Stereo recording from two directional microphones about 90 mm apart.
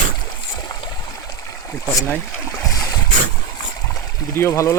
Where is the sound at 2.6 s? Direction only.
40° left (ahead or behind).